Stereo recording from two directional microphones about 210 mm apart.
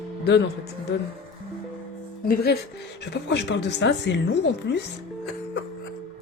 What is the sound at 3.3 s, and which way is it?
Speech, 55° left (ahead or behind).